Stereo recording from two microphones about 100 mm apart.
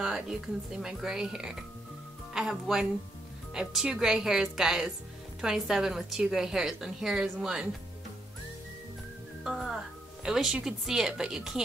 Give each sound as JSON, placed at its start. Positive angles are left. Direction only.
{"t": 0.0, "sound": "a woman's voice", "side_deg": -5}
{"t": 9.4, "sound": "speech", "side_deg": -5}